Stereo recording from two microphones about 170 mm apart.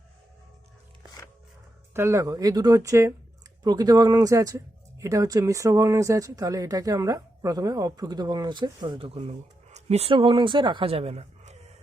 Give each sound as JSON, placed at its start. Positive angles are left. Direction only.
{"t": 1.9, "sound": "speech", "side_deg": -15}